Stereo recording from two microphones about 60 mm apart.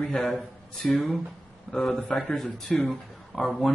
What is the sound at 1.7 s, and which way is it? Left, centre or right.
Speech, centre.